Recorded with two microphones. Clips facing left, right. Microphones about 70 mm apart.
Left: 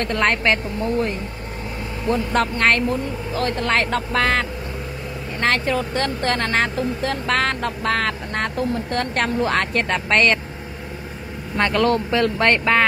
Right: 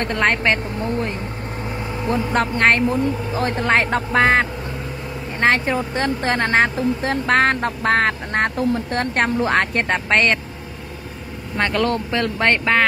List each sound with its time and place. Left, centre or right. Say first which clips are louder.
0.0 s speech: right 1 dB; centre
2.0 s speech: even; centre
7.2 s speech: right 5 dB; right
10.1 s speech: even; centre
11.5 s speech: left 2 dB; centre